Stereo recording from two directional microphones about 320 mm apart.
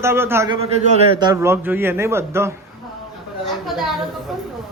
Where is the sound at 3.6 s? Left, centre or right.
Centre.